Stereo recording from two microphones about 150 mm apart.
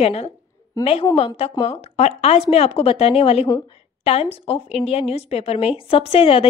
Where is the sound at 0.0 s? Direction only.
45° left (ahead or behind).